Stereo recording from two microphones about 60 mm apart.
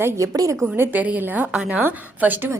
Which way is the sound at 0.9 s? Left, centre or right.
Right.